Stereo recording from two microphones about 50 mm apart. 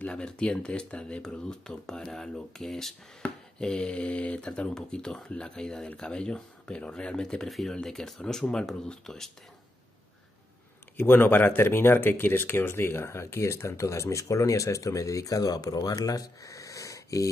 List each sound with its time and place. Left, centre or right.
0.0 s speech: centre
3.2 s speech: centre
7.4 s speech: centre
11.0 s speech: left
16.4 s wheeze: left